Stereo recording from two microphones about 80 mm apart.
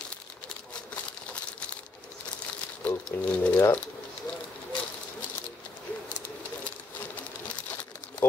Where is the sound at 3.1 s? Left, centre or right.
Left.